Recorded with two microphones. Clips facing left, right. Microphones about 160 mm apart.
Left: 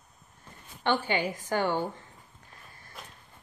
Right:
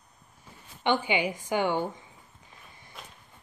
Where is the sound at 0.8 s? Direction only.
15° right (ahead or behind).